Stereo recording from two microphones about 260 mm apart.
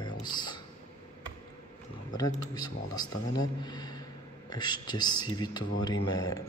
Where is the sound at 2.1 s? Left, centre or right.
Centre.